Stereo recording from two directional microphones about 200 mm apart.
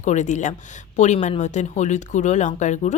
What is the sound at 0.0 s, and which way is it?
Speech, 35° left (ahead or behind).